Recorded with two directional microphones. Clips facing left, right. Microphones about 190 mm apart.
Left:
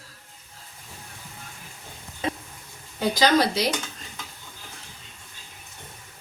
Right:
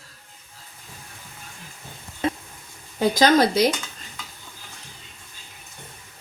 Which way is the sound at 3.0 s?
50° right (ahead or behind).